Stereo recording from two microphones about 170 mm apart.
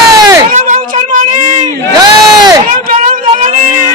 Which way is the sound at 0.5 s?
45° right (ahead or behind).